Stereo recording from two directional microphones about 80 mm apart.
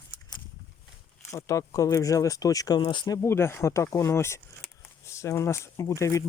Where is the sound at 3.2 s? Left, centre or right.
Left.